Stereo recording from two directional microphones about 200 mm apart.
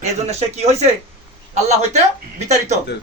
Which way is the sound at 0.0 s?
35° right (ahead or behind).